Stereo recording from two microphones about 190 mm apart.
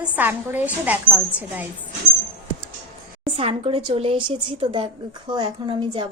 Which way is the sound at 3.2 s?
30° right (ahead or behind).